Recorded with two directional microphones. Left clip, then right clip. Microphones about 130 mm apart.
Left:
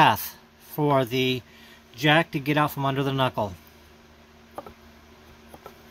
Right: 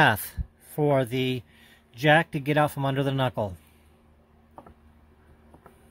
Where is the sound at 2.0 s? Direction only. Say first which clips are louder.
Even; 70° right (ahead or behind).